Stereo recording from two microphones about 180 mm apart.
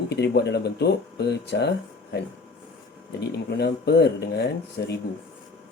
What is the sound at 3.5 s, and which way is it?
Speech, 65° left (ahead or behind).